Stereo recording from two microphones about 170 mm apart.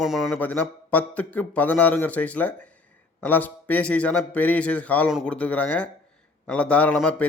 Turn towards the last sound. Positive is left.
turn(degrees=10)  # may be behind; listen again after turning